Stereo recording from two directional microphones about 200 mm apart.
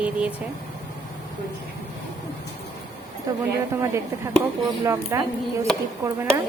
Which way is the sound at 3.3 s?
15° right (ahead or behind).